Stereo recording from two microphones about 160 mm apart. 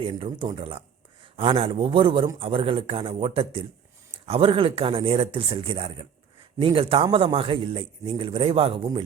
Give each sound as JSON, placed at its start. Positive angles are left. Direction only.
{"t": 0.0, "sound": "speech", "side_deg": -30}